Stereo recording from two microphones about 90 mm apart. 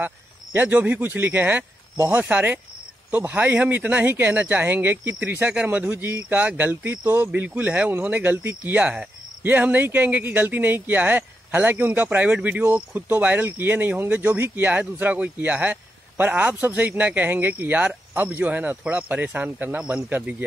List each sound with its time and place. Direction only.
0.0 s speech: 20° right (ahead or behind)